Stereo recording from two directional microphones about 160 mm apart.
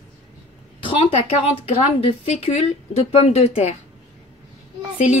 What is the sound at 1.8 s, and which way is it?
A woman's voice, 45° left (ahead or behind).